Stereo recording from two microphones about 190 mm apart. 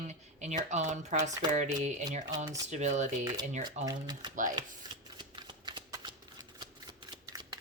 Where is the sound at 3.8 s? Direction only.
20° right (ahead or behind).